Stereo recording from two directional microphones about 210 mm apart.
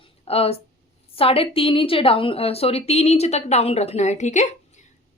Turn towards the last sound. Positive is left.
turn(degrees=35)  # may be behind; listen again after turning